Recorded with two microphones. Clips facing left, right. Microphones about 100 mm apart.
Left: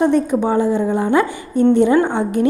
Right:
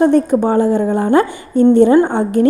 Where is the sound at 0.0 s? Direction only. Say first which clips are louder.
Right 4 dB; 45° right (ahead or behind).